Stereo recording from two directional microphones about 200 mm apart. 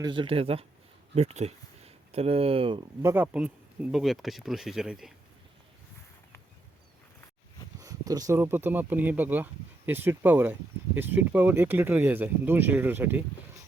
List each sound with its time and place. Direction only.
0.0 s speech: 25° right (ahead or behind)
3.0 s speech: 10° right (ahead or behind)
7.8 s speech: 15° right (ahead or behind)